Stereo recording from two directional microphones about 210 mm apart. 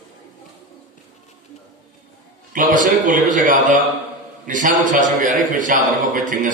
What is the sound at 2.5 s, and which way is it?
A man's voice, 40° right (ahead or behind).